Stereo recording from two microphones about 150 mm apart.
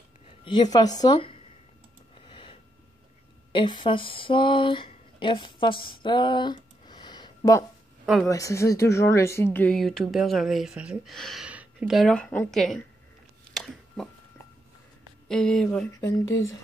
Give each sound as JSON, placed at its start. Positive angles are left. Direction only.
{"t": 0.5, "sound": "speech", "side_deg": 25}
{"t": 2.1, "sound": "a sound", "side_deg": 35}
{"t": 3.5, "sound": "speech", "side_deg": 30}
{"t": 8.0, "sound": "speech", "side_deg": 0}
{"t": 8.3, "sound": "speech", "side_deg": 20}
{"t": 9.8, "sound": "speech", "side_deg": 0}
{"t": 13.5, "sound": "a sound", "side_deg": 0}
{"t": 15.2, "sound": "speech", "side_deg": 5}
{"t": 15.9, "sound": "speech", "side_deg": 25}